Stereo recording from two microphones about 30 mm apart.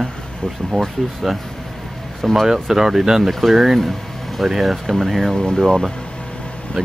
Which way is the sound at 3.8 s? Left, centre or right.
Centre.